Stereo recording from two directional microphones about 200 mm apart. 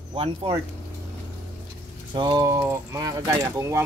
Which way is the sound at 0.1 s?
25° right (ahead or behind).